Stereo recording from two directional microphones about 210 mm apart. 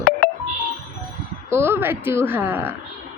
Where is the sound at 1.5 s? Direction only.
10° right (ahead or behind).